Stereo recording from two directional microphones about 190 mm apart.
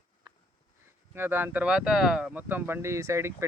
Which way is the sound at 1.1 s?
10° right (ahead or behind).